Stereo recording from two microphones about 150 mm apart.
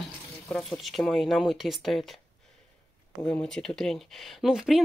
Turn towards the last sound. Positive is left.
turn(degrees=0)  # may be behind; listen again after turning